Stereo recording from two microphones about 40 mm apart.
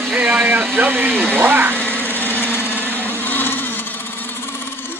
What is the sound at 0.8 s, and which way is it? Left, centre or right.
Speech, right.